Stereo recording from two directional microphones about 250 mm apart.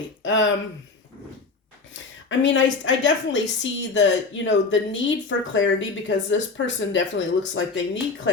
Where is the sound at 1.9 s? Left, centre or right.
Left.